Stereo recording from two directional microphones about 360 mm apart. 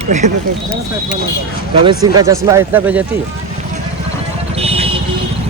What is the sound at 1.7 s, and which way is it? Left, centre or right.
Speech, centre.